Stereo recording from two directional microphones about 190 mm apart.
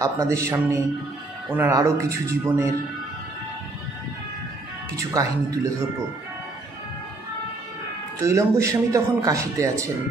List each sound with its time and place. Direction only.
0.0 s a man's voice: 15° right (ahead or behind)
4.9 s a man's voice: 15° right (ahead or behind)
8.2 s a man's voice: 15° right (ahead or behind)